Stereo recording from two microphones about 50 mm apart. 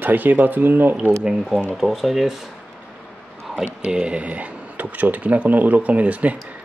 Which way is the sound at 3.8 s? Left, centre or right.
Right.